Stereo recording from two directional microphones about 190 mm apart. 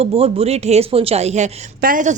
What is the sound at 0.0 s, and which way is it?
A woman's voice, 30° right (ahead or behind).